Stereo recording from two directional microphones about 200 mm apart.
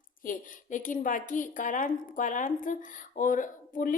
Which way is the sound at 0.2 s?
40° left (ahead or behind).